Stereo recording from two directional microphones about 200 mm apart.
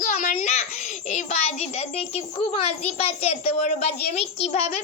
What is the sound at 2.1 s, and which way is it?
A child's voice, 30° left (ahead or behind).